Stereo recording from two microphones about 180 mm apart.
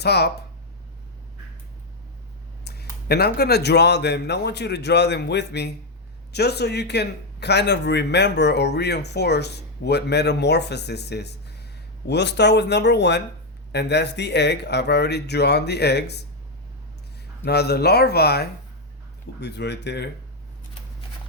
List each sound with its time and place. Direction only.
0.0 s speech: 65° left (ahead or behind)
3.1 s a man's voice: 60° left (ahead or behind)
17.4 s a man's voice: 65° left (ahead or behind)